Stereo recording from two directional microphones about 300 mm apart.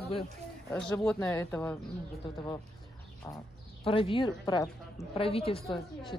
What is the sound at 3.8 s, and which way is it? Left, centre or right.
Speech, centre.